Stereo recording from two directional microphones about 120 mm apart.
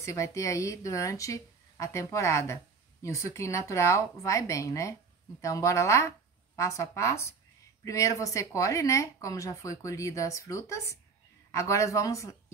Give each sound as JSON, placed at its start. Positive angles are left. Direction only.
{"t": 0.0, "sound": "speech", "side_deg": 25}